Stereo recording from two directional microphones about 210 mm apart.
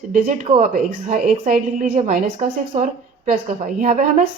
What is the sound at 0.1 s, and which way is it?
A woman's voice, 35° right (ahead or behind).